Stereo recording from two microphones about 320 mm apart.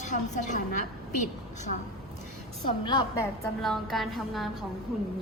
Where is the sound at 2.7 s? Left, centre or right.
Centre.